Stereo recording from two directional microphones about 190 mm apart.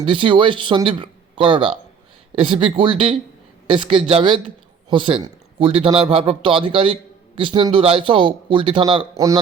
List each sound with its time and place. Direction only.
0.0 s a man's voice: 25° right (ahead or behind)